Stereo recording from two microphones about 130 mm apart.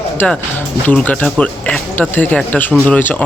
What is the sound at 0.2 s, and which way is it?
Speech, 15° left (ahead or behind).